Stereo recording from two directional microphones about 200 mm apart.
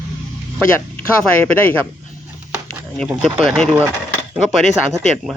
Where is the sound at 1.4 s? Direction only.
10° left (ahead or behind).